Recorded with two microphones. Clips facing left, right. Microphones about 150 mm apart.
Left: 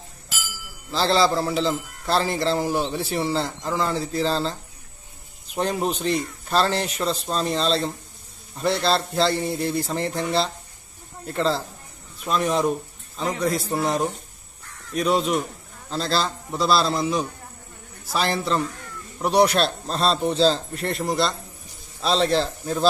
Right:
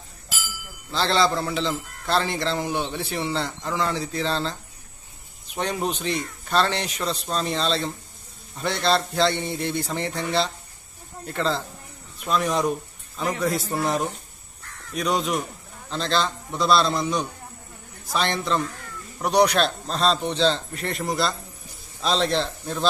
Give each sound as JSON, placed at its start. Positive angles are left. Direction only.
{"t": 0.9, "sound": "a man's voice", "side_deg": 0}
{"t": 5.5, "sound": "a man's voice", "side_deg": 0}
{"t": 15.9, "sound": "a man's voice", "side_deg": 35}
{"t": 16.5, "sound": "a man's voice", "side_deg": 0}